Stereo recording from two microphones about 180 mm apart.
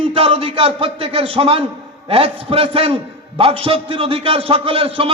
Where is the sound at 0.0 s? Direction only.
30° right (ahead or behind).